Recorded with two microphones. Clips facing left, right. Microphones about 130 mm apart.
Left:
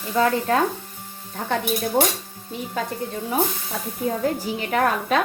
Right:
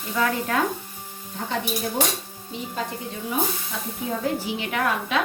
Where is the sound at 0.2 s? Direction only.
35° left (ahead or behind).